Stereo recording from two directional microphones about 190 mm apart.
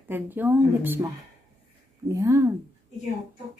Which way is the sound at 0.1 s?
10° right (ahead or behind).